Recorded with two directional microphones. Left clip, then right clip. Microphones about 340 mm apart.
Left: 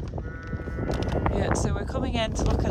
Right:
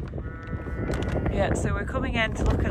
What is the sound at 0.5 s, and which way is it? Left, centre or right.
Speech, centre.